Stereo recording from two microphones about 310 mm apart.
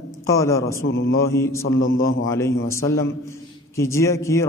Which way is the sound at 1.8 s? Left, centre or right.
Left.